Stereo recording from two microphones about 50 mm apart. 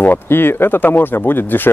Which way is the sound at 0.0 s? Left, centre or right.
Left.